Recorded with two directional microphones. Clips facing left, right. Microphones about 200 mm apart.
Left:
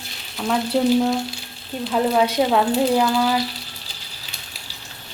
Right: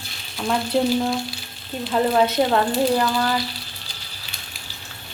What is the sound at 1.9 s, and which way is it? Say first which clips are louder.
Speech: even; 5° left (ahead or behind).